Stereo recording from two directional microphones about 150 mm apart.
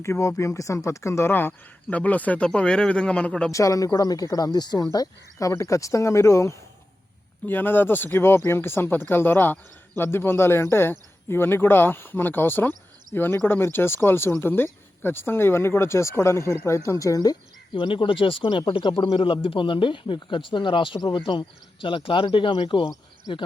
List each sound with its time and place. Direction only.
0.0 s speech: 20° left (ahead or behind)
3.5 s speech: 20° left (ahead or behind)
17.7 s speech: 35° left (ahead or behind)